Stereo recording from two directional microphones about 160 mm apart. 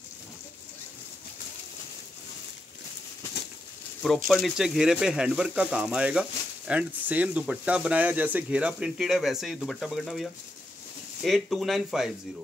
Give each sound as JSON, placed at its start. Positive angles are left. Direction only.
{"t": 4.3, "sound": "speech", "side_deg": 0}
{"t": 11.2, "sound": "speech", "side_deg": 0}